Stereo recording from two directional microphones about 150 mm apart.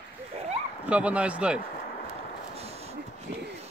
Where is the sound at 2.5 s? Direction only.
45° right (ahead or behind).